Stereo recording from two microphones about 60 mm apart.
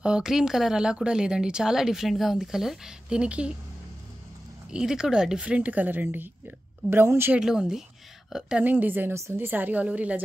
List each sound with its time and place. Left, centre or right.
0.0 s speech: centre
3.2 s a woman's voice: centre
4.6 s a woman's voice: centre; by 7.3 s right
7.3 s a woman's voice: centre
8.6 s a woman's voice: right